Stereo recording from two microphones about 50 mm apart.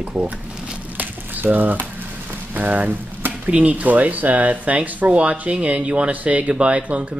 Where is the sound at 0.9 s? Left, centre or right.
Right.